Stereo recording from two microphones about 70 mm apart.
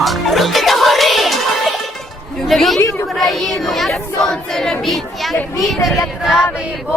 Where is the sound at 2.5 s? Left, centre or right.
Centre.